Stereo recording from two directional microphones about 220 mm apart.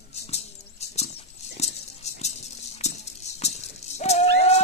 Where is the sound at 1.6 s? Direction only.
30° left (ahead or behind).